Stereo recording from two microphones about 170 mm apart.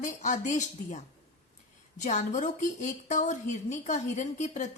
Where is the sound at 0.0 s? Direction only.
45° left (ahead or behind).